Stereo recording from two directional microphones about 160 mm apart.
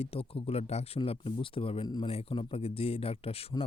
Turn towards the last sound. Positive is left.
turn(degrees=35)  # may be behind; listen again after turning